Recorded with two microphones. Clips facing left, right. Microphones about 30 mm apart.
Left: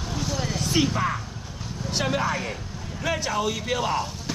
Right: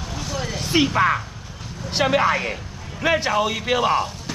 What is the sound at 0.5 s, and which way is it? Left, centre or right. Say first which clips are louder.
A man's voice: right 6 dB; right.